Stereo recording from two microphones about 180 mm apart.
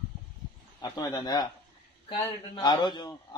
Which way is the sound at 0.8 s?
20° left (ahead or behind).